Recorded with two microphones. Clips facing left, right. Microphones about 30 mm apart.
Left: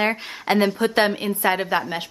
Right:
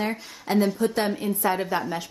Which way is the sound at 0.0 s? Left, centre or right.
Left.